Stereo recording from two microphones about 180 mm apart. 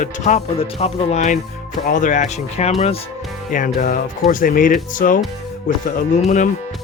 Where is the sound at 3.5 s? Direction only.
45° left (ahead or behind).